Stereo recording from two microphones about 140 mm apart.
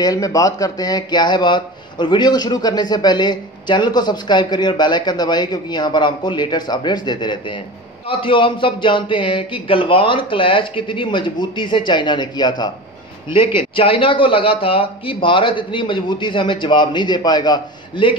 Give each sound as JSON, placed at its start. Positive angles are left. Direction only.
{"t": 0.0, "sound": "speech", "side_deg": 25}